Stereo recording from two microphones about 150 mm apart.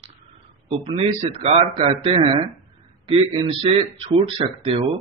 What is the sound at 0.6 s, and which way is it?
A man's voice, 40° right (ahead or behind).